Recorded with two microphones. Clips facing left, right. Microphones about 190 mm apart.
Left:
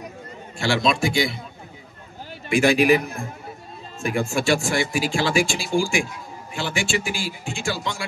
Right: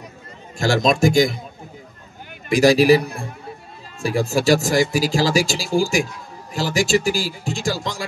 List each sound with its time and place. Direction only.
0.6 s a man's voice: 40° right (ahead or behind)
2.5 s speech: 40° right (ahead or behind)